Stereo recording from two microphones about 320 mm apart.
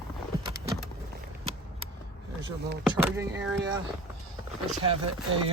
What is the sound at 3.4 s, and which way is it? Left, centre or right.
Speech, right.